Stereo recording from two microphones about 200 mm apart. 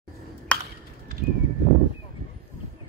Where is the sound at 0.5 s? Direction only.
5° left (ahead or behind).